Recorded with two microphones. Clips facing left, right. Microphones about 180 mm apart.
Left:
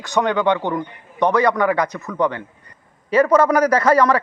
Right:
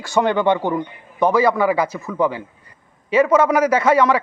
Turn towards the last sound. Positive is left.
turn(degrees=-5)  # may be behind; listen again after turning